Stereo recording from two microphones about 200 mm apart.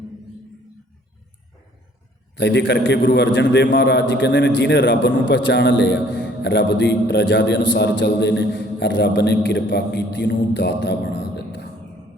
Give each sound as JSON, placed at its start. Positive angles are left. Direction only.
{"t": 2.3, "sound": "a man's voice", "side_deg": 60}